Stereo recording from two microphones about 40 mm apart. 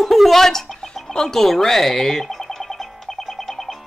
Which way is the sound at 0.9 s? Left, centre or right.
Centre.